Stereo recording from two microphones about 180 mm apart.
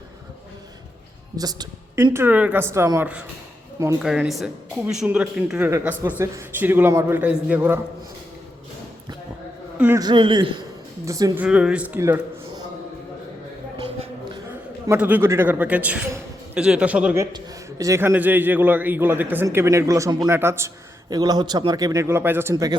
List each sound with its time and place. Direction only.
1.4 s a woman's voice: 20° right (ahead or behind)
9.7 s a man's voice: 10° right (ahead or behind)
10.0 s a man's voice: 25° right (ahead or behind)
11.4 s a man's voice: 5° right (ahead or behind)
14.8 s a woman's voice: 10° right (ahead or behind)
17.3 s a woman's voice: 20° right (ahead or behind)